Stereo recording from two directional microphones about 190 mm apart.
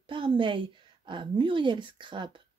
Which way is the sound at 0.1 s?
25° right (ahead or behind).